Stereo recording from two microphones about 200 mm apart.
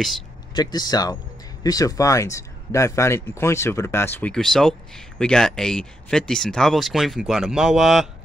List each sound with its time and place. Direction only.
0.6 s speech: 20° left (ahead or behind); by 8.1 s centre (ahead or behind)